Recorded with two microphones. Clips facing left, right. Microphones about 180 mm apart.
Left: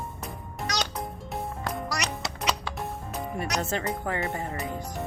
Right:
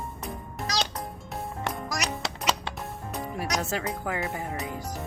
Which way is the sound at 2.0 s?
Centre (ahead or behind).